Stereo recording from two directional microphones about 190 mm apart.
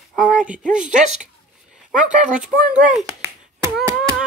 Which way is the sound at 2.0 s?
40° right (ahead or behind).